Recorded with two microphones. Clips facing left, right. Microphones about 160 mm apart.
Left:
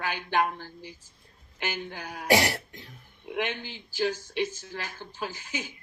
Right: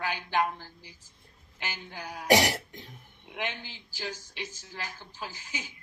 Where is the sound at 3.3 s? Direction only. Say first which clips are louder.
Left 5 dB; 60° left (ahead or behind).